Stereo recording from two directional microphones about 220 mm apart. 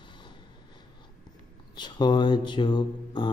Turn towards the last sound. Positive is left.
turn(degrees=20)  # may be behind; listen again after turning